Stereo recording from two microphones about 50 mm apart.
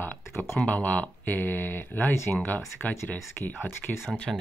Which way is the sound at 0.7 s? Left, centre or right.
Left.